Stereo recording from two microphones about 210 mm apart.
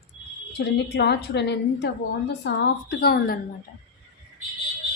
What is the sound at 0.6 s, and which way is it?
A woman's voice, 50° left (ahead or behind).